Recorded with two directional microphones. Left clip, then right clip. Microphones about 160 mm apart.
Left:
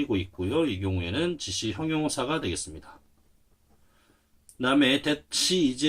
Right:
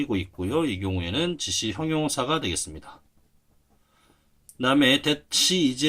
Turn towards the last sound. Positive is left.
turn(degrees=-35)  # may be behind; listen again after turning